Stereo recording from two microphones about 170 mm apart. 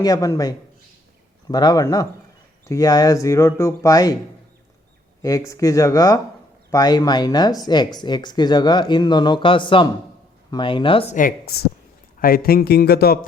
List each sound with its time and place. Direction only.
0.0 s speech: 20° left (ahead or behind)
5.2 s speech: 20° left (ahead or behind)
11.1 s a man's voice: 55° left (ahead or behind)